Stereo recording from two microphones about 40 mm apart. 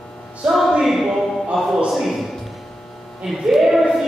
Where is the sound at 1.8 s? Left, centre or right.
Centre.